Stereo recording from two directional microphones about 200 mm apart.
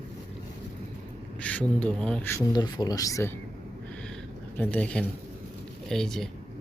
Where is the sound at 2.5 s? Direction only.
20° left (ahead or behind).